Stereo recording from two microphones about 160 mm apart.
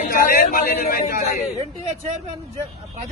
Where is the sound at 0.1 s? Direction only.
65° left (ahead or behind).